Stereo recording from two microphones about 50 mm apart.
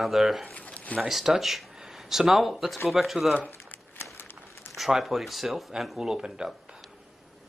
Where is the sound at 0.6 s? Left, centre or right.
Left.